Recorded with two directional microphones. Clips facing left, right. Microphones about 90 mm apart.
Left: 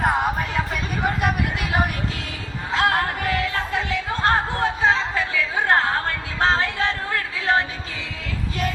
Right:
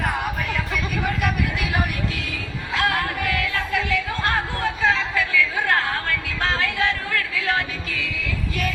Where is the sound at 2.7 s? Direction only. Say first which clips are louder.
Left 2 dB; 30° left (ahead or behind).